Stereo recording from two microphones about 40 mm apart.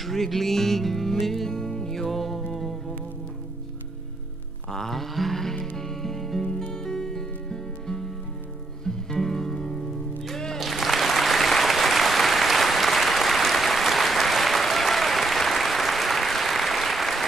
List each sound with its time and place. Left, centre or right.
0.0 s music: centre
4.6 s livestock: centre
5.8 s music: centre
10.6 s applause: centre